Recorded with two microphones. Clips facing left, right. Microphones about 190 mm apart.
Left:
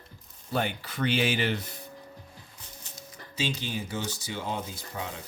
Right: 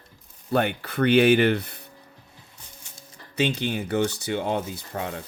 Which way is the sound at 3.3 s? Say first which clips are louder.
Right 7 dB; 65° right (ahead or behind).